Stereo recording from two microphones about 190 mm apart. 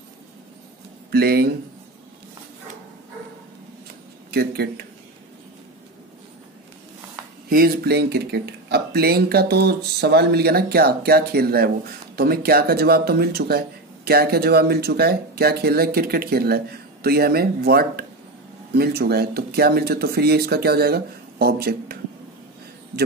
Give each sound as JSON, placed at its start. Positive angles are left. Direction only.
{"t": 1.1, "sound": "speech", "side_deg": -55}
{"t": 4.3, "sound": "speech", "side_deg": -55}
{"t": 7.4, "sound": "speech", "side_deg": -50}